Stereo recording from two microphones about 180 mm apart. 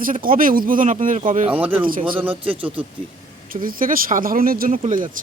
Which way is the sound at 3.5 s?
50° right (ahead or behind).